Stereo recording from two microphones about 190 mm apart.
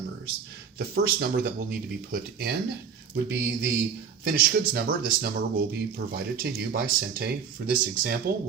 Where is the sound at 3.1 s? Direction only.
65° right (ahead or behind).